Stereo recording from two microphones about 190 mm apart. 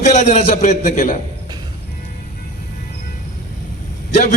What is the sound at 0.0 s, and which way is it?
A man's voice, 35° left (ahead or behind).